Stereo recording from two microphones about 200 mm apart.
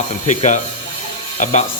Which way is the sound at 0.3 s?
35° left (ahead or behind).